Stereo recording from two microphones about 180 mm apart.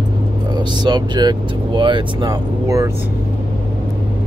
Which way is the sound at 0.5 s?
25° right (ahead or behind).